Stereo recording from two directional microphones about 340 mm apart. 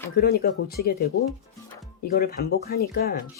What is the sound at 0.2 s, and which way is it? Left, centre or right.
Speech, left.